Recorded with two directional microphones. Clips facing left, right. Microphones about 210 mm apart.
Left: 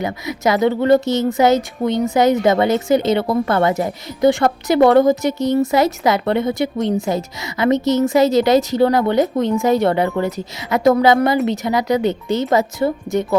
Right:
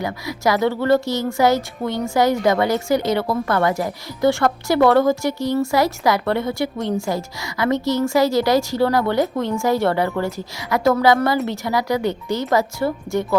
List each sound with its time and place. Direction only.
0.0 s a woman's voice: 20° left (ahead or behind)